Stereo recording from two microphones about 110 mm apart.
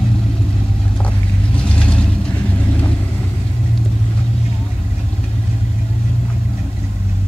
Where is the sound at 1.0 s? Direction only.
10° left (ahead or behind).